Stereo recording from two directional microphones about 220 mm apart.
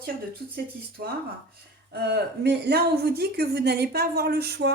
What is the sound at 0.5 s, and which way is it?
Speech, 45° right (ahead or behind).